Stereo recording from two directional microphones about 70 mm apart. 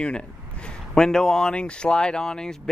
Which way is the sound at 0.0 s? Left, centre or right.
Centre.